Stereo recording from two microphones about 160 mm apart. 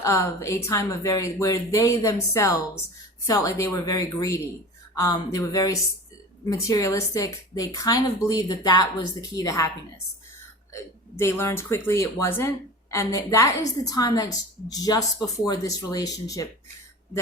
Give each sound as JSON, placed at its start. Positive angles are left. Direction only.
{"t": 0.0, "sound": "speech", "side_deg": 20}
{"t": 11.2, "sound": "speech", "side_deg": 15}